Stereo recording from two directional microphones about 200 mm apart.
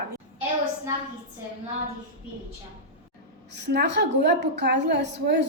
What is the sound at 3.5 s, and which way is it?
A woman's voice, 60° right (ahead or behind).